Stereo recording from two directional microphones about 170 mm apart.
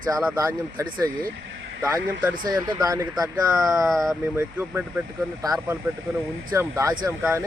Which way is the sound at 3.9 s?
Centre (ahead or behind).